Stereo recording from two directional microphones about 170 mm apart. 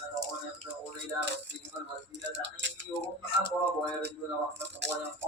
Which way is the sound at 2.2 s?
90° right.